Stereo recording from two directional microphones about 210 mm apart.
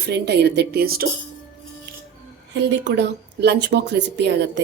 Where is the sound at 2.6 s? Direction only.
55° right (ahead or behind).